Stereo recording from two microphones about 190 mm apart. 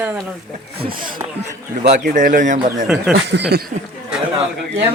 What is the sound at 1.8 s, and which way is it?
Speech, 35° right (ahead or behind).